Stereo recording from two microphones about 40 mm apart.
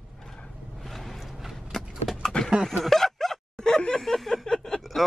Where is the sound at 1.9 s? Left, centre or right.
Centre.